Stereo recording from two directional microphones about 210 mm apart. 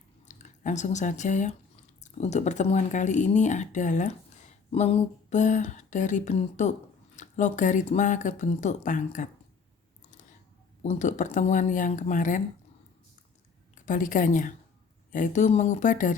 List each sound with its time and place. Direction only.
0.3 s speech: 35° left (ahead or behind)
10.8 s speech: 35° left (ahead or behind)
13.8 s speech: 40° left (ahead or behind)